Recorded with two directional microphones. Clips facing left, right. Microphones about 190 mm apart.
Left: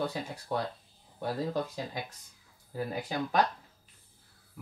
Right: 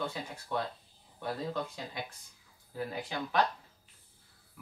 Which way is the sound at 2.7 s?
40° left (ahead or behind).